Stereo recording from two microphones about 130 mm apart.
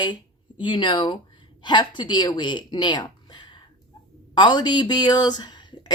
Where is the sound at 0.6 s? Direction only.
40° left (ahead or behind).